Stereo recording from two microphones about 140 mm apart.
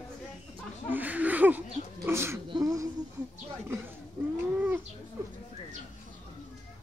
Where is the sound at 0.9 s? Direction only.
10° right (ahead or behind).